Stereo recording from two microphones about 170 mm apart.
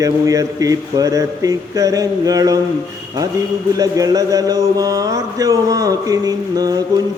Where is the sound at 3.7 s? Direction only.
20° right (ahead or behind).